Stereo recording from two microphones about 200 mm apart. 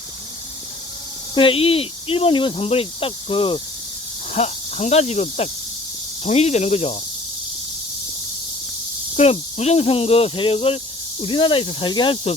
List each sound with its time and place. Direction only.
1.4 s speech: 25° left (ahead or behind)
9.1 s speech: 30° left (ahead or behind)